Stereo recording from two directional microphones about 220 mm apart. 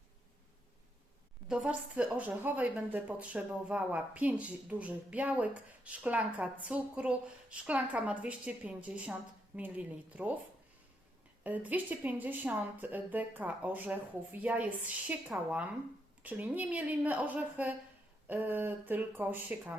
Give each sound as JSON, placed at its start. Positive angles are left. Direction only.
{"t": 1.5, "sound": "speech", "side_deg": -5}
{"t": 11.4, "sound": "speech", "side_deg": -5}